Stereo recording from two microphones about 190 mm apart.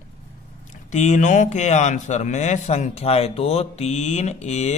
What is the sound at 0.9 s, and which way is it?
Speech, 40° left (ahead or behind).